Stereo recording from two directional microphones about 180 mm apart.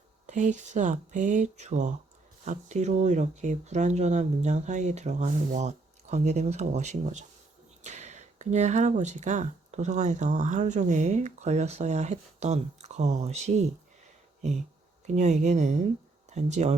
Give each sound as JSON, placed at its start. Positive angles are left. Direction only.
{"t": 0.3, "sound": "speech", "side_deg": -40}